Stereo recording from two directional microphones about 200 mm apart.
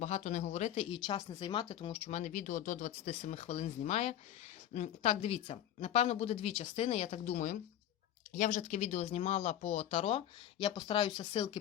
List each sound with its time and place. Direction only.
0.0 s speech: 35° left (ahead or behind)